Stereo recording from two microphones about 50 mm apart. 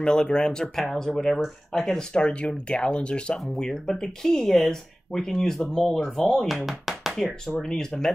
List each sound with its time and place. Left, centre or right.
0.0 s speech: centre
7.6 s speech: centre